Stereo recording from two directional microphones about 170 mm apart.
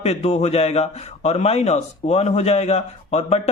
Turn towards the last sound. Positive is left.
turn(degrees=40)  # may be behind; listen again after turning